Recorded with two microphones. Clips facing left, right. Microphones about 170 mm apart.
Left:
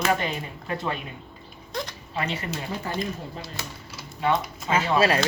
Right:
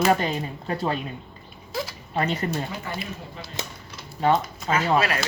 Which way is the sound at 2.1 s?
40° right (ahead or behind).